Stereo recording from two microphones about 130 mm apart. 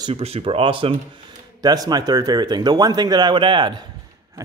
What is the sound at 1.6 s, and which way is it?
Speech, 30° right (ahead or behind).